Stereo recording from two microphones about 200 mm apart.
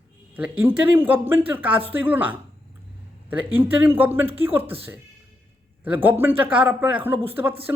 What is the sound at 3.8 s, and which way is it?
Speech, 10° right (ahead or behind).